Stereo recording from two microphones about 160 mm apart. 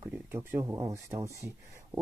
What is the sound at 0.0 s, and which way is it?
Speech, 15° right (ahead or behind).